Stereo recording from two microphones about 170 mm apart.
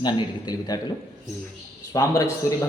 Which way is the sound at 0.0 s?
25° left (ahead or behind).